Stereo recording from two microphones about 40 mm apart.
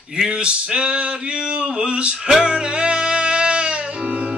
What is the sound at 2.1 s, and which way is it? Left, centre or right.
Music, centre.